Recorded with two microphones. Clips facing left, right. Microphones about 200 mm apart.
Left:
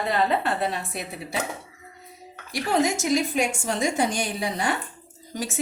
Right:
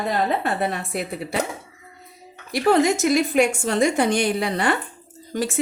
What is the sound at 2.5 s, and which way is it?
A woman's voice, 65° right (ahead or behind).